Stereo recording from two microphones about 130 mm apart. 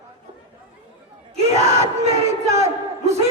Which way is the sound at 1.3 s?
55° right (ahead or behind).